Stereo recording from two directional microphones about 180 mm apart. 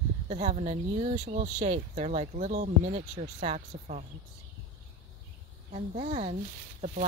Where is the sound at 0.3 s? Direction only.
35° right (ahead or behind).